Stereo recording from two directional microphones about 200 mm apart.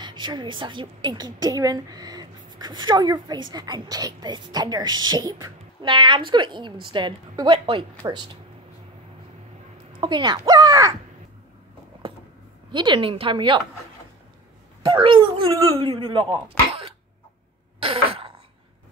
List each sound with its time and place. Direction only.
0.0 s a woman's voice: 20° right (ahead or behind)
9.9 s speech: 20° right (ahead or behind)
12.7 s a woman's voice: 25° right (ahead or behind)
14.9 s a woman's voice: 25° right (ahead or behind)